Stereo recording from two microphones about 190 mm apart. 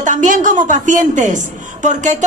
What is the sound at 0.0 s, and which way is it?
A woman's voice, 40° right (ahead or behind).